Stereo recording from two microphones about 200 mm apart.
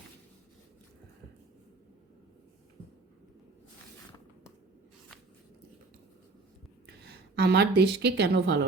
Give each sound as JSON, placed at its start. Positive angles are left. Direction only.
{"t": 6.8, "sound": "a woman's voice", "side_deg": -55}